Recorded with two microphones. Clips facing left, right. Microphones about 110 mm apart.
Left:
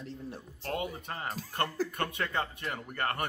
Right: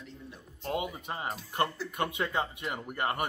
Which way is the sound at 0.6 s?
20° right (ahead or behind).